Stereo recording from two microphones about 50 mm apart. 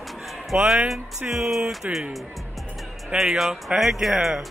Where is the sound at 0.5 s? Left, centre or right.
Centre.